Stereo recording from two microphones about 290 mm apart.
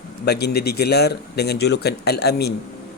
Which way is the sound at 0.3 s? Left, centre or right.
Left.